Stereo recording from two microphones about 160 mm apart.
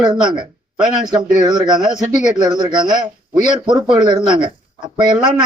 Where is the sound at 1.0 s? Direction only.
25° right (ahead or behind).